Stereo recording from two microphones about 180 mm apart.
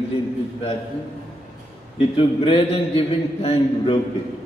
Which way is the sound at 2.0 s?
30° left (ahead or behind).